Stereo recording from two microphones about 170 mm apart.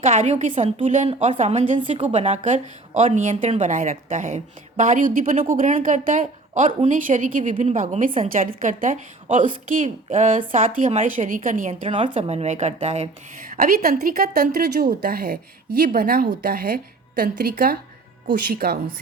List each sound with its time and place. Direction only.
0.0 s a woman's voice: 40° right (ahead or behind)
11.9 s speech: 30° right (ahead or behind)
13.5 s speech: 60° right (ahead or behind)